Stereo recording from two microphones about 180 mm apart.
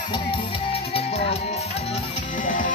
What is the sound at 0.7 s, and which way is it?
Music, 35° left (ahead or behind).